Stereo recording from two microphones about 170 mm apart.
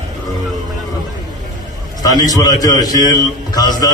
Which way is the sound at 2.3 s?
20° left (ahead or behind).